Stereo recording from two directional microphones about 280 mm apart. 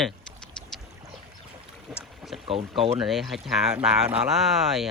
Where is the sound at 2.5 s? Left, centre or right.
Centre.